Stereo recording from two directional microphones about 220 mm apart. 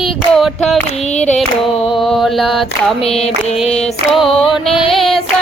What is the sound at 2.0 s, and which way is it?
Mantra, centre (ahead or behind).